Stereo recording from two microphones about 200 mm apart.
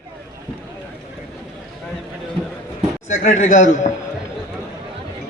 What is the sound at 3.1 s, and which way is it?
Speech, 40° left (ahead or behind).